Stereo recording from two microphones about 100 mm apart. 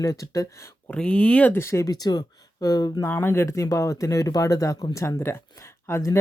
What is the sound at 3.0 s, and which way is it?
Speech, 25° left (ahead or behind).